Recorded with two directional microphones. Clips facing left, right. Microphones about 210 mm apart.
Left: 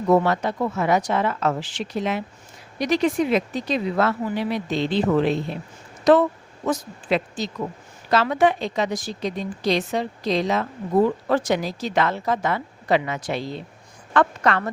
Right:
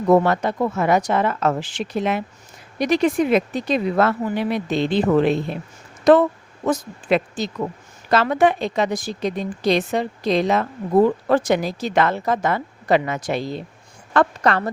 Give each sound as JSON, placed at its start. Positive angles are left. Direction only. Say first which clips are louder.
{"t": 0.1, "sound": "a woman's voice", "louder": "right 3 dB", "side_deg": -50}